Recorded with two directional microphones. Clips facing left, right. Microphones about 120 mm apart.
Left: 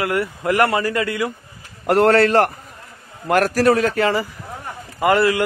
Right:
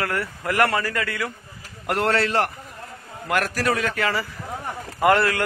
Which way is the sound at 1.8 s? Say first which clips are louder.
Left 8 dB; 40° left (ahead or behind).